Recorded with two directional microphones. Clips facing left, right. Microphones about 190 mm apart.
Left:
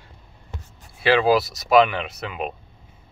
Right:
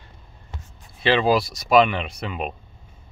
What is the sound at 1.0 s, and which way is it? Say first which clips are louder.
Speech: left 1 dB; 10° left (ahead or behind).